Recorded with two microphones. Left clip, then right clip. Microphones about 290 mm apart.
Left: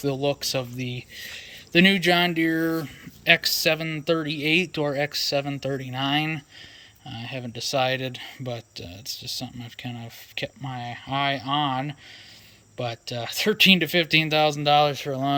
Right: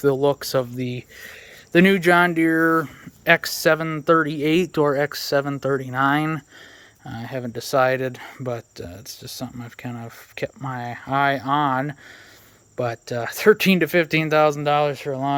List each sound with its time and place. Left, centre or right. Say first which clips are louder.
0.0 s speech: right 6 dB; centre
1.7 s speech: right 3 dB; centre